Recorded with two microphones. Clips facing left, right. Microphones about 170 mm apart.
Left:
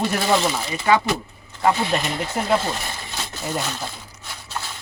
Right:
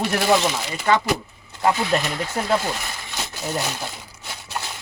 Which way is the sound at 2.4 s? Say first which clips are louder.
Even; 5° left (ahead or behind).